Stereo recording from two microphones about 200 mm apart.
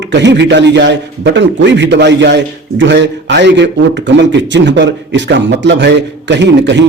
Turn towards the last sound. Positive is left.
turn(degrees=-60)  # may be behind; listen again after turning